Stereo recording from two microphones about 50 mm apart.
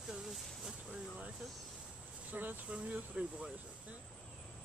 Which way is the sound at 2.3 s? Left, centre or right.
Right.